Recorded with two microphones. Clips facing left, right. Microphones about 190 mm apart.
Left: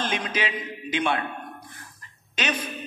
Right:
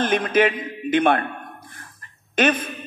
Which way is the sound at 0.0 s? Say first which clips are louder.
Right 10 dB; 50° right (ahead or behind).